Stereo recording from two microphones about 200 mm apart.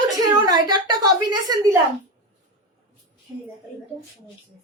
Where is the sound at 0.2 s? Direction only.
20° right (ahead or behind).